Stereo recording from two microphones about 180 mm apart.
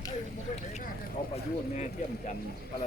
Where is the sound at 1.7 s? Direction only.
40° left (ahead or behind).